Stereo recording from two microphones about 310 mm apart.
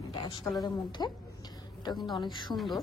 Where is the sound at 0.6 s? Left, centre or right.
Centre.